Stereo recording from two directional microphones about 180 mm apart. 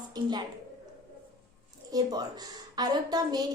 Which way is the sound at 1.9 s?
20° right (ahead or behind).